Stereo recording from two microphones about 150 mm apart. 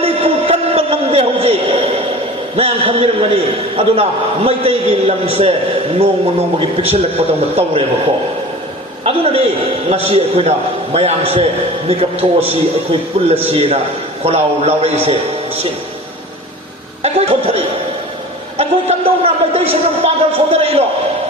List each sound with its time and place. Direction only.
0.0 s a sound: 40° right (ahead or behind)
2.6 s a man's voice: 40° right (ahead or behind)
6.6 s a man's voice: 40° right (ahead or behind)
9.0 s a sound: 40° right (ahead or behind)
10.1 s a man's voice: 40° right (ahead or behind)
17.0 s a man's voice: 40° right (ahead or behind)